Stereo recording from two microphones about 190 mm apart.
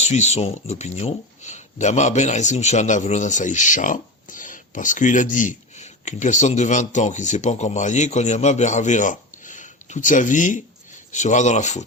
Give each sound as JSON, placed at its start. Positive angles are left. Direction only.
{"t": 0.0, "sound": "speech", "side_deg": 35}